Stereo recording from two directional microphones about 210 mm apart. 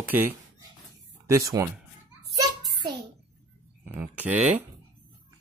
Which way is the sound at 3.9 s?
5° right (ahead or behind).